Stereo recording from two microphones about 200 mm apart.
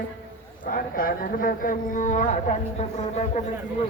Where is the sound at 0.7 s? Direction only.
45° left (ahead or behind).